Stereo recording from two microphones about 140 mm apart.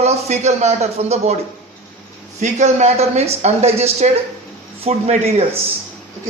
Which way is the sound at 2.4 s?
55° right (ahead or behind).